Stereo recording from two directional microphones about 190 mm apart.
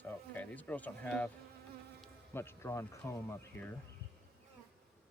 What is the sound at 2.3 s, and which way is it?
Bee, 15° left (ahead or behind).